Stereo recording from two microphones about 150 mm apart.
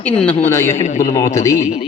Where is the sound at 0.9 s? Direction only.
60° left (ahead or behind).